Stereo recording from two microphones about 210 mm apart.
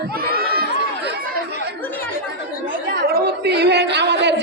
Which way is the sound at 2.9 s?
50° right (ahead or behind).